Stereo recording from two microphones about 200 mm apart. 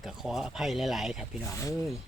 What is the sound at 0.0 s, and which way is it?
Speech, centre (ahead or behind).